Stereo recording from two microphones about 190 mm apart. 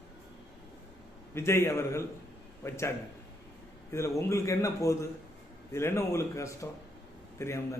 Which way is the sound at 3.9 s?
15° left (ahead or behind).